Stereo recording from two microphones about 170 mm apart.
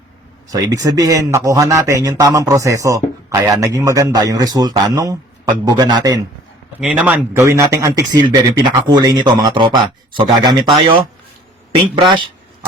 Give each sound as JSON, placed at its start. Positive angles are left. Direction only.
{"t": 0.5, "sound": "a man's voice", "side_deg": -20}
{"t": 6.7, "sound": "a man's voice", "side_deg": -10}